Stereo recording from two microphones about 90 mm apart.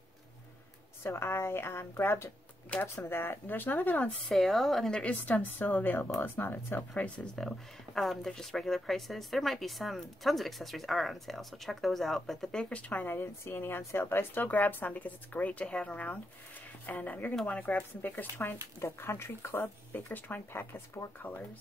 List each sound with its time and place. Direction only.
1.0 s speech: 30° left (ahead or behind)
4.3 s speech: centre (ahead or behind)
5.0 s speech: 20° left (ahead or behind)
7.3 s speech: 5° left (ahead or behind)
18.8 s speech: 30° left (ahead or behind)